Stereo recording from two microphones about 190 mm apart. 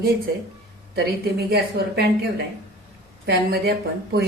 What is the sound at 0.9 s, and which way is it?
Speech, 55° right (ahead or behind).